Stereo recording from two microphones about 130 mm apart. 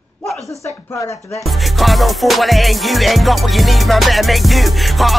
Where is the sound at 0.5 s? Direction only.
25° left (ahead or behind).